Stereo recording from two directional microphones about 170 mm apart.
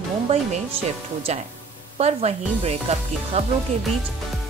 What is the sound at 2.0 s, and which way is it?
Speech, 40° right (ahead or behind).